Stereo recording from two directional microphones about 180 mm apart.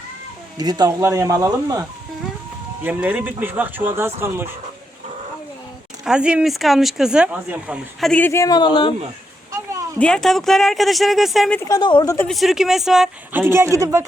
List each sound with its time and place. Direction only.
0.5 s speech: 20° right (ahead or behind)
2.8 s speech: 10° right (ahead or behind)
6.1 s speech: 5° right (ahead or behind)
8.1 s speech: 10° left (ahead or behind)
10.0 s speech: 5° left (ahead or behind)
11.7 s speech: 25° left (ahead or behind)
12.3 s speech: centre (ahead or behind)
13.4 s speech: 15° right (ahead or behind)